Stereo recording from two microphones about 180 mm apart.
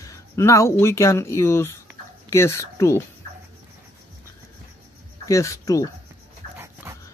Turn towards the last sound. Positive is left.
turn(degrees=15)  # may be behind; listen again after turning